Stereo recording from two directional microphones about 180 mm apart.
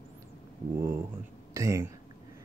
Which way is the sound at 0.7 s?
15° right (ahead or behind).